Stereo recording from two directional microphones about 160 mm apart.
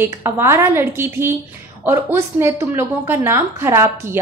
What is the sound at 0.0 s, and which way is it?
A woman's voice, 15° right (ahead or behind).